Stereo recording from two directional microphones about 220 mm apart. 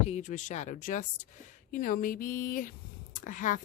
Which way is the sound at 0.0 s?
30° left (ahead or behind).